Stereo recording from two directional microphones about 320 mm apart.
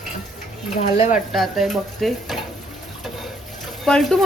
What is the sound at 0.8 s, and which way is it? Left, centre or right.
Speech, left.